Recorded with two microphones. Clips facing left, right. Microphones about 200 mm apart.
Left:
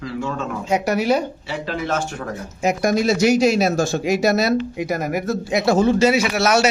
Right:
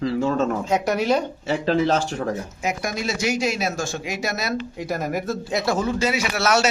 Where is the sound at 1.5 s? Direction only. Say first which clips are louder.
Right 5 dB; 35° right (ahead or behind).